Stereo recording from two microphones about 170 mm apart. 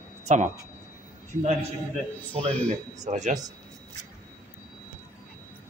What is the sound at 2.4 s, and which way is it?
Speech, 35° right (ahead or behind).